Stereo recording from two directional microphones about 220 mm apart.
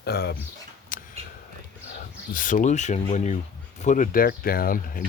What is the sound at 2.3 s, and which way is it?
Speech, 35° left (ahead or behind).